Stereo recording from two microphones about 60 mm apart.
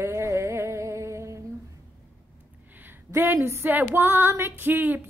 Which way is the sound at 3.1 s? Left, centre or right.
Right.